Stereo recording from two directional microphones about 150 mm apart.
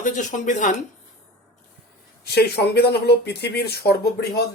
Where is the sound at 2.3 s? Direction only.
90° left.